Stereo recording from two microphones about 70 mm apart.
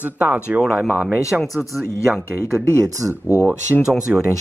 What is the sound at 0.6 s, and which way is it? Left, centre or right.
Speech, centre.